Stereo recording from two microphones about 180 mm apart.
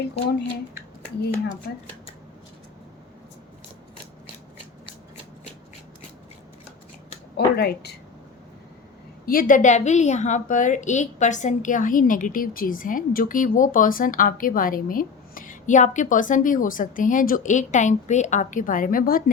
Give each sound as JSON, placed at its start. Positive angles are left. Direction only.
{"t": 0.0, "sound": "speech", "side_deg": 65}
{"t": 7.3, "sound": "speech", "side_deg": 60}
{"t": 9.2, "sound": "a woman's voice", "side_deg": 50}